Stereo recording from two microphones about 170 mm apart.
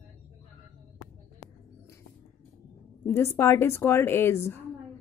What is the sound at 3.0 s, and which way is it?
A woman's voice, 15° left (ahead or behind).